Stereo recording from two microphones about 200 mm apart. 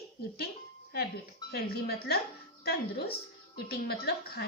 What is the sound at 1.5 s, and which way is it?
A woman's voice, 50° left (ahead or behind).